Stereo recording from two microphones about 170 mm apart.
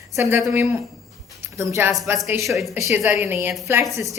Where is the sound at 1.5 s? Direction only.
15° right (ahead or behind).